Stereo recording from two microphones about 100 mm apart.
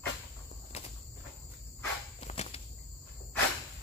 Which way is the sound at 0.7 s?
90° left.